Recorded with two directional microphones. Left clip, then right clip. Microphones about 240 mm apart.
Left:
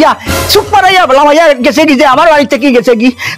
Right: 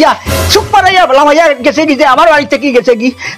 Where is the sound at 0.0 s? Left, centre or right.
Left.